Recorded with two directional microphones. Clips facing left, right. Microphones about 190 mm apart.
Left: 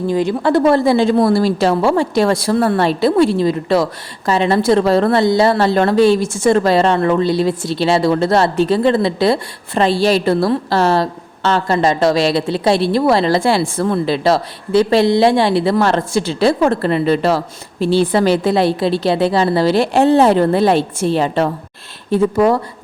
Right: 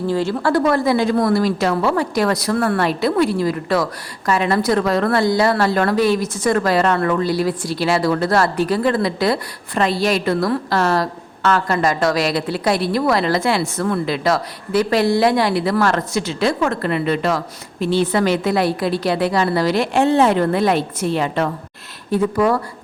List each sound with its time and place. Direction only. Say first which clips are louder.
0.1 s a woman's voice: left 3 dB; 15° left (ahead or behind)